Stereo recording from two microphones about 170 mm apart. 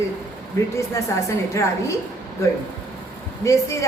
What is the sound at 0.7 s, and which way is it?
A woman's voice, 15° left (ahead or behind).